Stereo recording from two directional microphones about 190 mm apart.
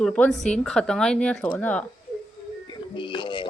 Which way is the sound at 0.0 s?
5° left (ahead or behind).